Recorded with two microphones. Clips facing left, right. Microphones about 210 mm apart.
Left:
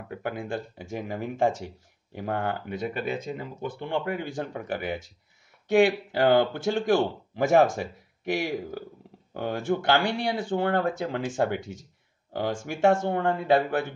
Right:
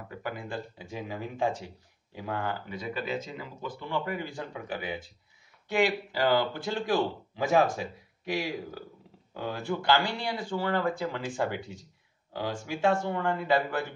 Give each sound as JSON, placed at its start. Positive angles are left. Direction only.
{"t": 0.1, "sound": "speech", "side_deg": 55}
{"t": 9.3, "sound": "speech", "side_deg": 55}